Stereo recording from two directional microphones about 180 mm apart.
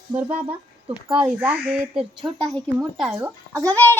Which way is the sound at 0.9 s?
5° right (ahead or behind).